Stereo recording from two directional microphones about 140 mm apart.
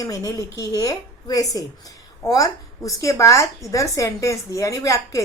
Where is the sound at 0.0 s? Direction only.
25° left (ahead or behind).